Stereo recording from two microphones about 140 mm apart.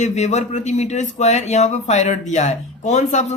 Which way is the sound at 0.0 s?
55° left (ahead or behind).